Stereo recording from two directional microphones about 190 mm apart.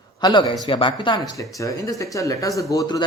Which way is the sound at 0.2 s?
20° left (ahead or behind).